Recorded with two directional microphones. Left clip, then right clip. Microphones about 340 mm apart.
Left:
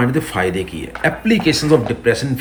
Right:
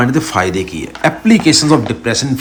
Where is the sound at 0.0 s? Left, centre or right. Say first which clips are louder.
Right 4 dB; centre.